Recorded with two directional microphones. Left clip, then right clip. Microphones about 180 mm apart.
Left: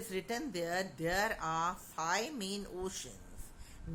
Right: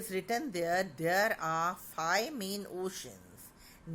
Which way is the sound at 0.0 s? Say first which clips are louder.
Right 4 dB; 30° right (ahead or behind).